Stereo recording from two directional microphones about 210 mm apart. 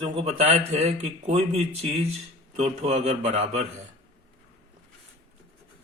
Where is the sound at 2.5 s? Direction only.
30° right (ahead or behind).